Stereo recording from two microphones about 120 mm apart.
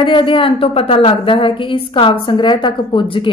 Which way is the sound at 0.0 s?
45° left (ahead or behind).